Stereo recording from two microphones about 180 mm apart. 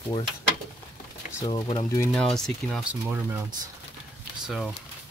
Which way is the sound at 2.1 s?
5° left (ahead or behind).